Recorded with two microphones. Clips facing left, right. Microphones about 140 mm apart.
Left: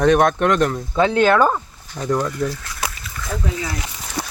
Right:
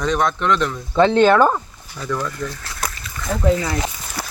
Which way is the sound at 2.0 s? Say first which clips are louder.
Left 4 dB; 35° left (ahead or behind).